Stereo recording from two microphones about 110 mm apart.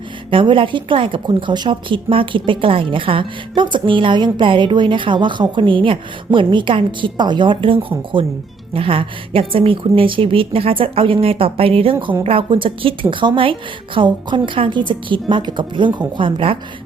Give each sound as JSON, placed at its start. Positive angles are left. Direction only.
{"t": 0.3, "sound": "a woman's voice", "side_deg": -50}